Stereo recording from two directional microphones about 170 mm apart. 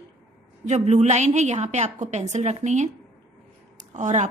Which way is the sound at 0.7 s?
40° right (ahead or behind).